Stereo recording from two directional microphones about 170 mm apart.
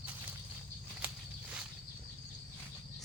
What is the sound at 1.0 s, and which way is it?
Walk, 5° right (ahead or behind).